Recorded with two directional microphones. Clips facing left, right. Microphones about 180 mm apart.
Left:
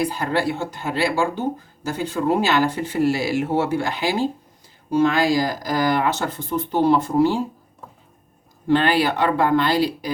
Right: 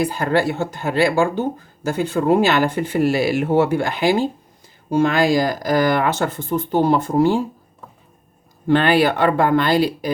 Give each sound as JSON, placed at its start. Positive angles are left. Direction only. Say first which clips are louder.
{"t": 0.1, "sound": "speech", "louder": "right 3 dB", "side_deg": -45}
{"t": 8.6, "sound": "speech", "louder": "right 3 dB", "side_deg": -60}